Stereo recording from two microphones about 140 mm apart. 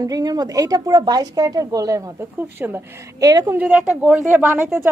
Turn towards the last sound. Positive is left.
turn(degrees=-15)  # may be behind; listen again after turning